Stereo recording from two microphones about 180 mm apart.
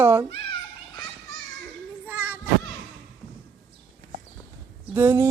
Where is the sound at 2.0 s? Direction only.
10° right (ahead or behind).